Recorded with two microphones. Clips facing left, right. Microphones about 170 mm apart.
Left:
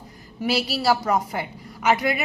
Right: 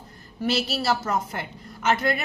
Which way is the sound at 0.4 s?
10° left (ahead or behind).